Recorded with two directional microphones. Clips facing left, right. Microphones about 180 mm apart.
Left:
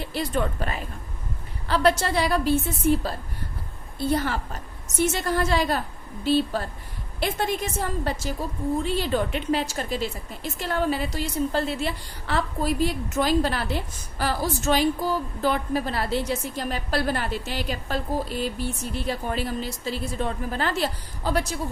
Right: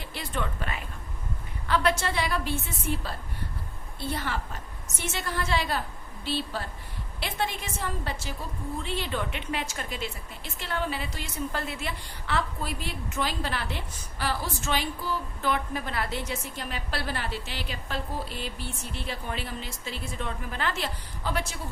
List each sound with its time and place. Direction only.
0.1 s speech: 40° left (ahead or behind)
4.1 s a woman's voice: 40° left (ahead or behind)